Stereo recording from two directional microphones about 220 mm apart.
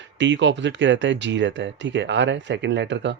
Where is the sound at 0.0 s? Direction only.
55° right (ahead or behind).